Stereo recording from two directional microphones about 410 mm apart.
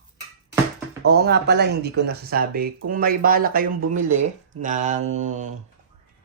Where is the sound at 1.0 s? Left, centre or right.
Right.